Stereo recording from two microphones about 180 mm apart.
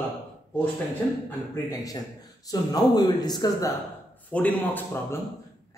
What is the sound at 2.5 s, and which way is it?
Speech, 20° left (ahead or behind).